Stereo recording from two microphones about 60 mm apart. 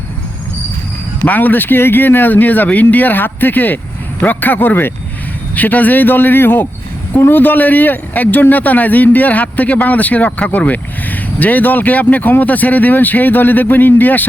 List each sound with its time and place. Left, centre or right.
1.2 s speech: left